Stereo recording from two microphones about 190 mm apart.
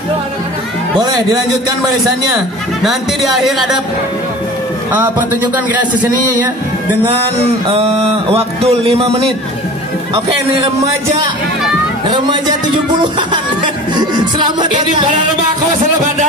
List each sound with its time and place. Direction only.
0.9 s music: 20° right (ahead or behind)
2.8 s a man's voice: centre (ahead or behind)
4.9 s speech: 10° right (ahead or behind)
8.3 s music: 30° right (ahead or behind)
12.1 s music: 20° right (ahead or behind)
13.9 s music: 25° right (ahead or behind)